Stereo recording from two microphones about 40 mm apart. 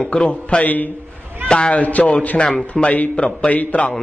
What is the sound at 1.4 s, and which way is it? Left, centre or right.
Speech, left.